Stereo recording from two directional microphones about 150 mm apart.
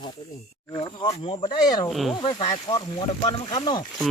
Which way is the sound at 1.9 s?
Centre (ahead or behind).